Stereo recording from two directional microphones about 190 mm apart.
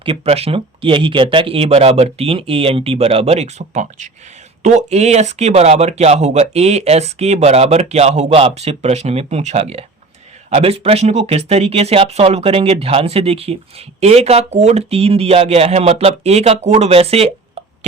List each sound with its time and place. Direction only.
0.0 s speech: 30° right (ahead or behind)